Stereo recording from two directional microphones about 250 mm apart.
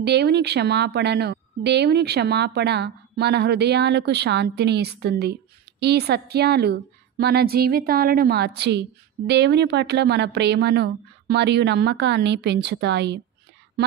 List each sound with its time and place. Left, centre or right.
0.0 s a woman's voice: right